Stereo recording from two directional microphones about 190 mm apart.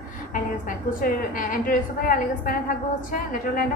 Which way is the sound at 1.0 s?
45° left (ahead or behind).